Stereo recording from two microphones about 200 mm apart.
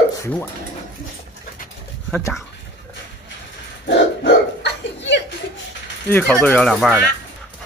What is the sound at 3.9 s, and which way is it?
Dog, 60° left (ahead or behind).